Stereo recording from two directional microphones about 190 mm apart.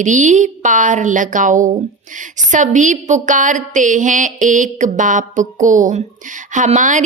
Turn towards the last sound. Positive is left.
turn(degrees=-40)  # may be behind; listen again after turning